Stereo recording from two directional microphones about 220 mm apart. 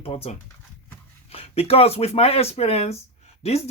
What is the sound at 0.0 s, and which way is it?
Speech, 25° left (ahead or behind).